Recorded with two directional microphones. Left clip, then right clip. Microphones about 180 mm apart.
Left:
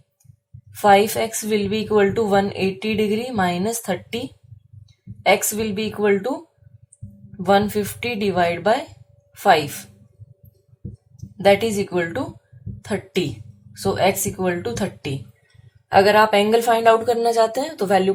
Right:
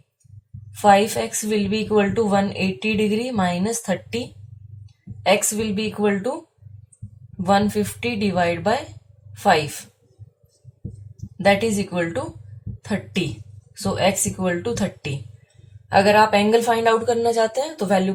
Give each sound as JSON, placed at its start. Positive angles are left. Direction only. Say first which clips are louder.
{"t": 0.8, "sound": "a woman's voice", "louder": "left 1 dB", "side_deg": 40}
{"t": 5.2, "sound": "a woman's voice", "louder": "left 1 dB", "side_deg": 40}
{"t": 7.4, "sound": "a woman's voice", "louder": "left 1 dB", "side_deg": 40}
{"t": 11.4, "sound": "a woman's voice", "louder": "left 2 dB", "side_deg": 40}